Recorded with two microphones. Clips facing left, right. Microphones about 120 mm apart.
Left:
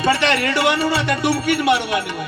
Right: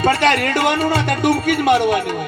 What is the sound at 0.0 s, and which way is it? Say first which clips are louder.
Music: right 2 dB; 45° right (ahead or behind).